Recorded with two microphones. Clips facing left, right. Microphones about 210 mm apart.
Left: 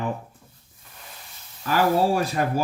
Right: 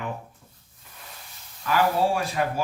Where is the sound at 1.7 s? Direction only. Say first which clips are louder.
Left 2 dB; 40° left (ahead or behind).